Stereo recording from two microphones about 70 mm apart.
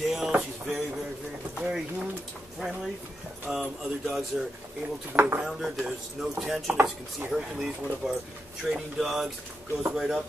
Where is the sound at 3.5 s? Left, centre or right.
Centre.